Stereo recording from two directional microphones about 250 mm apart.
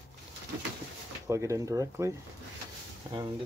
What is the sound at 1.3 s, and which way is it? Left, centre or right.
Speech, centre.